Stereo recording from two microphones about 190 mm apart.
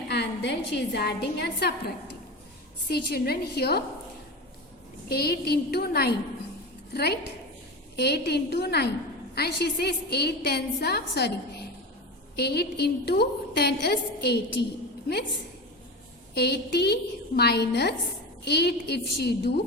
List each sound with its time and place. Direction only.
0.1 s a woman's voice: 65° left (ahead or behind)
5.0 s a woman's voice: 55° left (ahead or behind)
16.3 s a woman's voice: 60° left (ahead or behind)